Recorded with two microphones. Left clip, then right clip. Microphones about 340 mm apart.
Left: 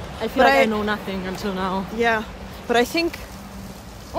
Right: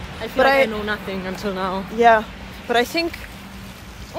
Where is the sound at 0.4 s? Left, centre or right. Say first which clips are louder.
Even; centre.